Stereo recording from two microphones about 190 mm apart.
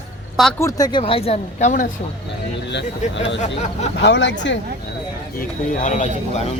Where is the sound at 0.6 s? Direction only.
20° left (ahead or behind); by 1.9 s 40° left (ahead or behind).